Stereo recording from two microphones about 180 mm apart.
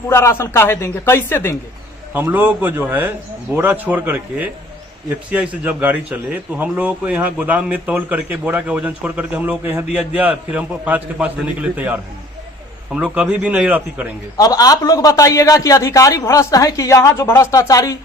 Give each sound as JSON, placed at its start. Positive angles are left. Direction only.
{"t": 0.1, "sound": "a man's voice", "side_deg": 15}
{"t": 2.1, "sound": "a man's voice", "side_deg": -10}
{"t": 14.3, "sound": "a man's voice", "side_deg": 20}